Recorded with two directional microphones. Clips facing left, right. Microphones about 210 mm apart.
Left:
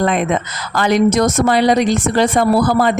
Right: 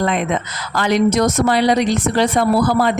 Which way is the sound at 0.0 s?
50° left (ahead or behind).